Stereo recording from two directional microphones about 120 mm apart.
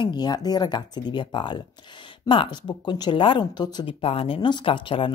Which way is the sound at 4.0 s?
55° left (ahead or behind).